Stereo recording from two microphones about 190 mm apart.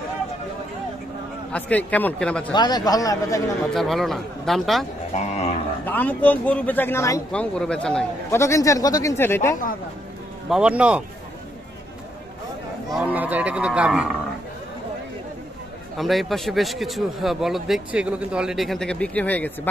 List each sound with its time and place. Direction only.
1.5 s a man's voice: 5° left (ahead or behind)
2.5 s a man's voice: 20° left (ahead or behind)
3.7 s a man's voice: centre (ahead or behind)
5.1 s speech: 35° left (ahead or behind)
5.9 s a man's voice: 10° left (ahead or behind)
10.5 s speech: 5° right (ahead or behind)
13.0 s speech: 10° right (ahead or behind)
16.0 s a man's voice: centre (ahead or behind)